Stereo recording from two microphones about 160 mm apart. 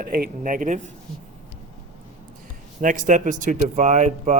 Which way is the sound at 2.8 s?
55° right (ahead or behind).